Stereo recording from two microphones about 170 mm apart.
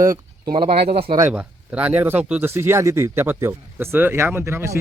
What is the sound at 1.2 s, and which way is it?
Speech, 10° right (ahead or behind).